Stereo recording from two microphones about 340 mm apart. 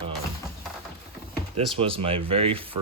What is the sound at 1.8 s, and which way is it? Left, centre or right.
Speech, centre.